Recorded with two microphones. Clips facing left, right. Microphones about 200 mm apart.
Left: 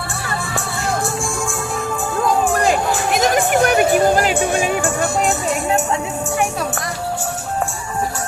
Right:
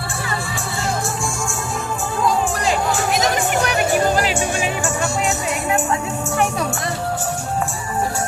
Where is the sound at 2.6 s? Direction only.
50° left (ahead or behind).